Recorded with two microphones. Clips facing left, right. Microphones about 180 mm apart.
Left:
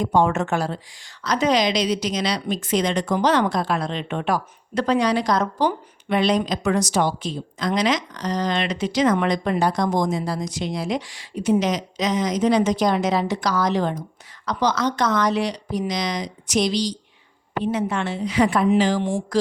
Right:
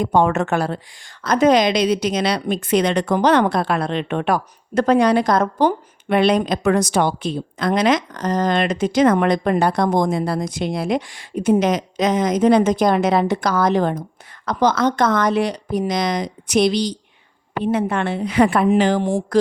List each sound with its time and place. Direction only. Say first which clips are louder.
0.0 s a woman's voice: right 2 dB; 60° right (ahead or behind)
19.3 s mantra: right 5 dB; 55° right (ahead or behind)